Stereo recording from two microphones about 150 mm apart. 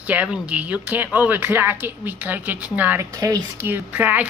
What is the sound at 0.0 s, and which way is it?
Speech, 10° right (ahead or behind).